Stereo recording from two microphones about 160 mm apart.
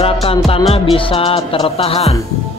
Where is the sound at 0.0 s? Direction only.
35° left (ahead or behind).